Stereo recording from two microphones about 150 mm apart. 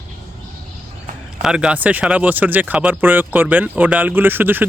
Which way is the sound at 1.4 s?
5° right (ahead or behind).